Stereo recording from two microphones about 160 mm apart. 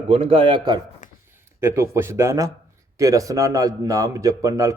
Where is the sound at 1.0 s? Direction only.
50° left (ahead or behind).